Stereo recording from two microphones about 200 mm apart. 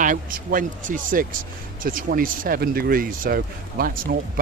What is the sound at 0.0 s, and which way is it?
Speech, 40° right (ahead or behind).